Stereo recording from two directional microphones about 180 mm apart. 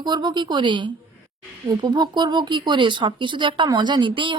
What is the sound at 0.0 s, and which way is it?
Speech, 25° right (ahead or behind).